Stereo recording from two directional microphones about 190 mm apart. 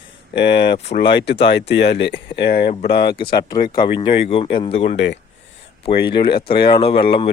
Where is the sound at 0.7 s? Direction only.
35° left (ahead or behind).